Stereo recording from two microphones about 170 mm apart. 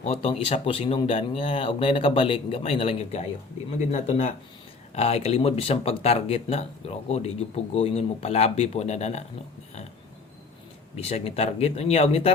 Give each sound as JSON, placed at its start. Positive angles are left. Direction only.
{"t": 0.0, "sound": "speech", "side_deg": 35}
{"t": 11.0, "sound": "speech", "side_deg": 35}